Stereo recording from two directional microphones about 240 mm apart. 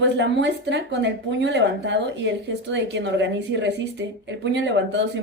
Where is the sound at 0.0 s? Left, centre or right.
Right.